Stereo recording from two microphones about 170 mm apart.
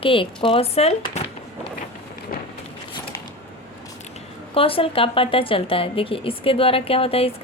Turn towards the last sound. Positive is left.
turn(degrees=35)  # may be behind; listen again after turning